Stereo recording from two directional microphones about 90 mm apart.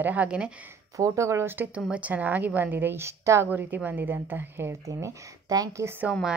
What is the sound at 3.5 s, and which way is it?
A woman's voice, 20° right (ahead or behind).